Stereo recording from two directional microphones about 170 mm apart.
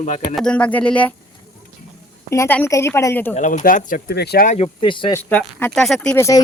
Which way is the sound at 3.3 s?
45° left (ahead or behind).